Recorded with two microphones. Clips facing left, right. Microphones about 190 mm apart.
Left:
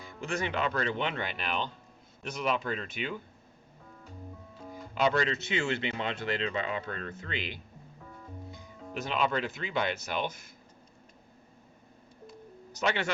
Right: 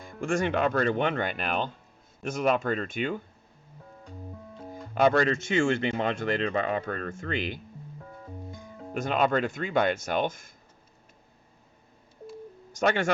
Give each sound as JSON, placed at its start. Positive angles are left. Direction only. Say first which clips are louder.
{"t": 0.0, "sound": "speech", "louder": "right 6 dB", "side_deg": -50}
{"t": 4.7, "sound": "speech", "louder": "right 5 dB", "side_deg": -50}
{"t": 12.7, "sound": "a man's voice", "louder": "right 6 dB", "side_deg": -50}